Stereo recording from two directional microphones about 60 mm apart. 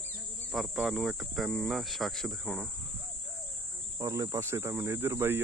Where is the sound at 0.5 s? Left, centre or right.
Centre.